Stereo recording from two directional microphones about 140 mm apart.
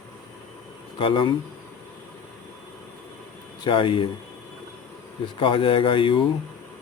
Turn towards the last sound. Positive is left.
turn(degrees=40)  # may be behind; listen again after turning